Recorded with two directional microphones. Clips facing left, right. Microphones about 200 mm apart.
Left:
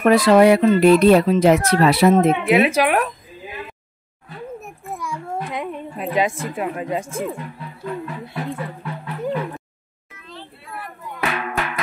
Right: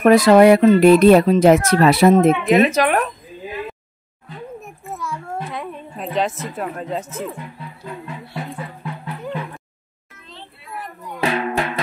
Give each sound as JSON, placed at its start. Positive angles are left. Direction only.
{"t": 0.0, "sound": "speech", "side_deg": -45}
{"t": 2.4, "sound": "speech", "side_deg": 10}
{"t": 4.9, "sound": "a sound", "side_deg": 15}
{"t": 5.9, "sound": "speech", "side_deg": 10}
{"t": 10.2, "sound": "music", "side_deg": -20}